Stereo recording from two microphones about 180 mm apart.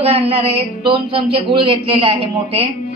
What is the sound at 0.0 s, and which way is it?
A woman's voice, 35° right (ahead or behind).